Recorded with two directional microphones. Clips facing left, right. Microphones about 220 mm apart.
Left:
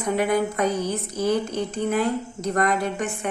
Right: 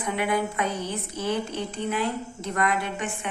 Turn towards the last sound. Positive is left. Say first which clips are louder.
# left 5 dB
turn(degrees=40)  # may be behind; listen again after turning